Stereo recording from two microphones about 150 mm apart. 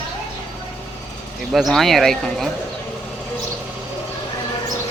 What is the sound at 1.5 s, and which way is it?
Speech, centre (ahead or behind).